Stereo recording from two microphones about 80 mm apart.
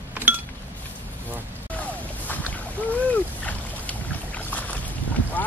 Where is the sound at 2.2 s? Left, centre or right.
Centre.